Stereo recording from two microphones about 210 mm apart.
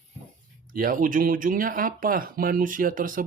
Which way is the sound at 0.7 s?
40° right (ahead or behind).